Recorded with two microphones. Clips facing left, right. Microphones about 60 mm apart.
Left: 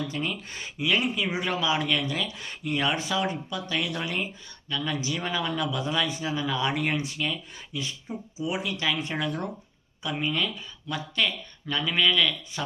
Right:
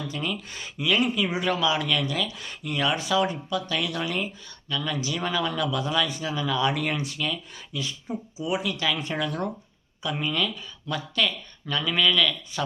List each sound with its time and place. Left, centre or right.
0.1 s speech: left